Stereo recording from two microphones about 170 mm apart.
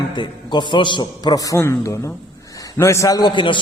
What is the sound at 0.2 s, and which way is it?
A man's voice, 25° left (ahead or behind).